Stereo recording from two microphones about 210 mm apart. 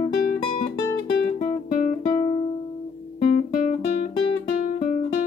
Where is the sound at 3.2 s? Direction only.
35° left (ahead or behind).